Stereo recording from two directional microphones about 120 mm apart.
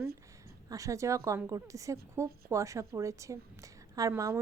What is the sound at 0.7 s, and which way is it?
Speech, 25° right (ahead or behind).